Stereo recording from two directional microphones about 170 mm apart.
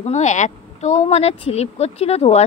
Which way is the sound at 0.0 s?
45° left (ahead or behind).